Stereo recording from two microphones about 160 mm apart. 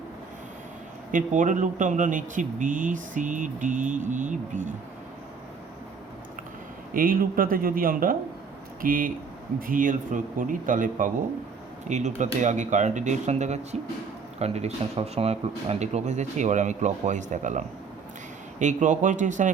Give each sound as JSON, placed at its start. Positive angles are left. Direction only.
{"t": 1.1, "sound": "speech", "side_deg": -50}
{"t": 6.9, "sound": "a man's voice", "side_deg": -65}
{"t": 18.6, "sound": "speech", "side_deg": -50}